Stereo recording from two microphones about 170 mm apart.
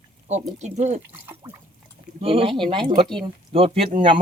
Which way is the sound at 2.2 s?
35° right (ahead or behind).